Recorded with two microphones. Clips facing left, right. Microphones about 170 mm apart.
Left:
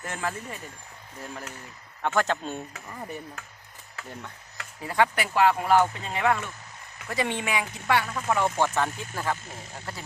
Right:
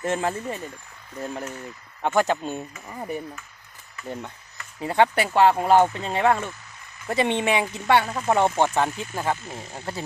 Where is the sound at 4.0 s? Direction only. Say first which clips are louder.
Right 7 dB; 80° left.